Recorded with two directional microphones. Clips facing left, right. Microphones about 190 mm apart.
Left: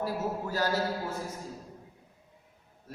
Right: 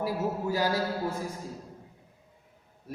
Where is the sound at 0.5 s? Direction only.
10° right (ahead or behind).